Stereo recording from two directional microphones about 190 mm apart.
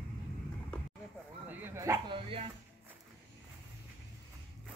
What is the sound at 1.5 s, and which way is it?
Bow-wow, 10° right (ahead or behind).